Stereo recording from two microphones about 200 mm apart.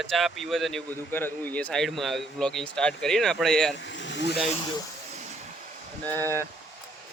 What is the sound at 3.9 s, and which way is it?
Vehicle, 65° left (ahead or behind).